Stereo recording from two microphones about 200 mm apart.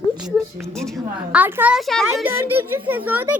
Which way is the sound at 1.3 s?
10° right (ahead or behind).